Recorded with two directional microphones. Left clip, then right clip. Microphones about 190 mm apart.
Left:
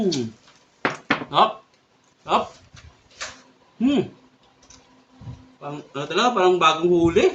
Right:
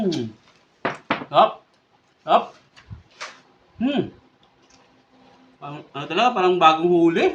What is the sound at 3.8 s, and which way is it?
Speech, 20° right (ahead or behind).